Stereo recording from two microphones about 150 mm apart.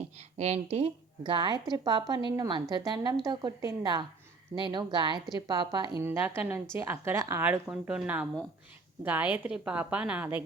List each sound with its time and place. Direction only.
0.3 s a woman's voice: 45° right (ahead or behind); by 5.9 s 30° right (ahead or behind)
6.0 s a woman's voice: 15° right (ahead or behind)
7.7 s a woman's voice: 5° right (ahead or behind)